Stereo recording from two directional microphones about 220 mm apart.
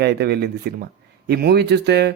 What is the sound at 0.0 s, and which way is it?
Speech, 45° right (ahead or behind).